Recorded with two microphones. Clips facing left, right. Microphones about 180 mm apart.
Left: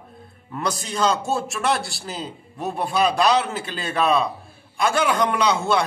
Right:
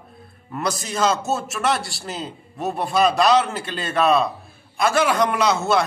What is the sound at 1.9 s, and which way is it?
A man's voice, centre (ahead or behind).